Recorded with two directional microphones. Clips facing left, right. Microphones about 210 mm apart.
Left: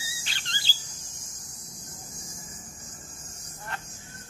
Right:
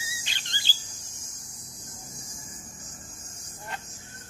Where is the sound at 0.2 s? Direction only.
20° right (ahead or behind).